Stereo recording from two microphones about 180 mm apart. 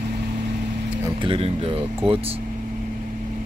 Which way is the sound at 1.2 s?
30° right (ahead or behind).